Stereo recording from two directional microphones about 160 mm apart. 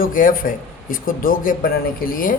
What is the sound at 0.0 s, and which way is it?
A man's voice, 60° left (ahead or behind).